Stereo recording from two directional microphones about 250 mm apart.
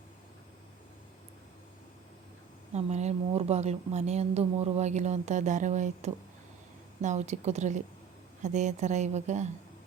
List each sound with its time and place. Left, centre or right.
2.7 s speech: right